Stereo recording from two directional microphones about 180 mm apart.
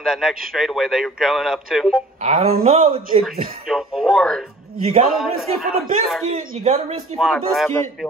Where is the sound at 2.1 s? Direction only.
35° right (ahead or behind).